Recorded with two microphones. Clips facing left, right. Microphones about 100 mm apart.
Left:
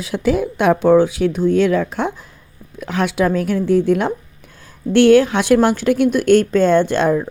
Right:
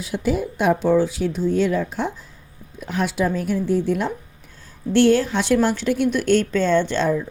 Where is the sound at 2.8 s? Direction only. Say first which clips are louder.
Left 4 dB; 80° left.